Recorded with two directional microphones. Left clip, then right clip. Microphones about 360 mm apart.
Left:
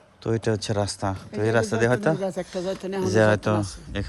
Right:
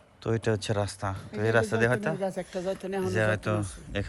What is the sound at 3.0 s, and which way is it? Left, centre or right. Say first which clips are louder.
Speech: left 8 dB; centre.